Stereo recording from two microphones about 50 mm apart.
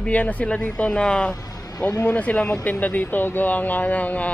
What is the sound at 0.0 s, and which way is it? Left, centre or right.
Speech, left.